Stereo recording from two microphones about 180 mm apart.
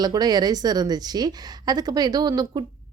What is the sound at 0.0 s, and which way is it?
A woman's voice, 20° right (ahead or behind).